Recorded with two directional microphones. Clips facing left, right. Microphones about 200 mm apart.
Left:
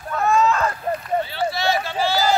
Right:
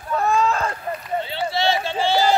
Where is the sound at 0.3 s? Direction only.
30° right (ahead or behind).